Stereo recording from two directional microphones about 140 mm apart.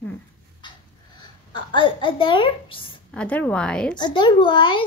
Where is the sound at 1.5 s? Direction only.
35° left (ahead or behind).